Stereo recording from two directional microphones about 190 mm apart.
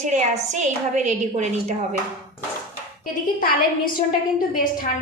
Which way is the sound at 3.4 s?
45° left (ahead or behind).